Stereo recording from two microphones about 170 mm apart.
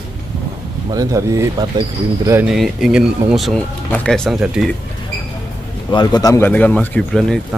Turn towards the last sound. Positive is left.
turn(degrees=5)  # may be behind; listen again after turning